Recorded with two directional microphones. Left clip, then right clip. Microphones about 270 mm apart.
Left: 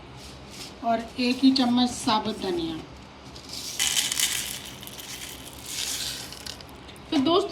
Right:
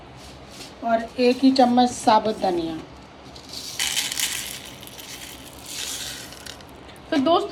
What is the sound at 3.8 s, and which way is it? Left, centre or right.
Crushing, centre.